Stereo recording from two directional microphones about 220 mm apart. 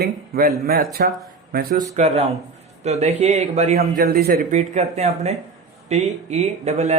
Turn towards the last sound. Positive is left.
turn(degrees=-30)  # may be behind; listen again after turning